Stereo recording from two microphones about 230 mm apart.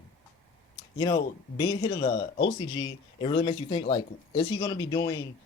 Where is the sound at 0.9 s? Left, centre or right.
Centre.